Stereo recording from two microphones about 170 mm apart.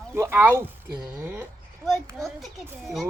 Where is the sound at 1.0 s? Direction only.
10° right (ahead or behind).